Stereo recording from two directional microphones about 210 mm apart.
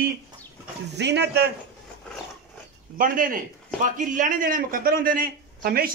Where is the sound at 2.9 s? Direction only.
40° right (ahead or behind).